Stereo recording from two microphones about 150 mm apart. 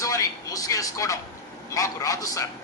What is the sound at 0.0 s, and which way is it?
Vehicle, 20° left (ahead or behind).